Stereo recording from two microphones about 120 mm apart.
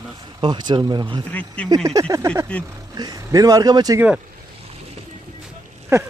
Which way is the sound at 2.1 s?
20° right (ahead or behind).